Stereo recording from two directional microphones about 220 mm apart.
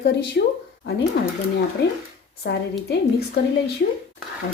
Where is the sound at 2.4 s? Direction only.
45° left (ahead or behind).